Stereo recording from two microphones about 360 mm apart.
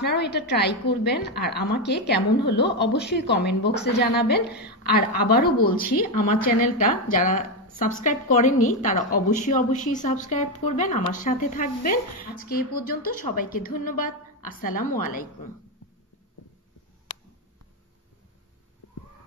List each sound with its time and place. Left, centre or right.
0.0 s a woman's voice: left